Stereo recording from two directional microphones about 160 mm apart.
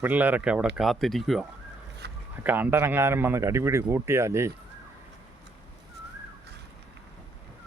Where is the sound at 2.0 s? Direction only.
90° right.